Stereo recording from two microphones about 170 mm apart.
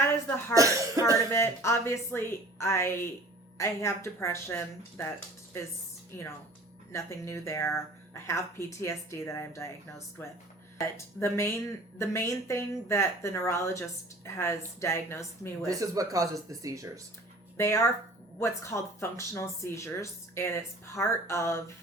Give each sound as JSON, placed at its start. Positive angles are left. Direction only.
{"t": 0.5, "sound": "speech", "side_deg": -20}
{"t": 1.3, "sound": "speech", "side_deg": 15}
{"t": 6.9, "sound": "speech", "side_deg": 15}
{"t": 15.6, "sound": "speech", "side_deg": -20}
{"t": 17.6, "sound": "speech", "side_deg": 15}